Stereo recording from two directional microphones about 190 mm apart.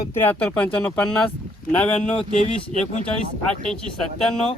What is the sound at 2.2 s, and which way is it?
Speech, 30° left (ahead or behind).